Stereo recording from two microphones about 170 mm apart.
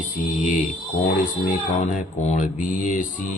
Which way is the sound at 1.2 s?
45° left (ahead or behind).